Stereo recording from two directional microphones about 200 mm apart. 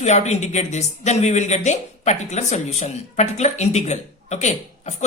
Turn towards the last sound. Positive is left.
turn(degrees=35)  # may be behind; listen again after turning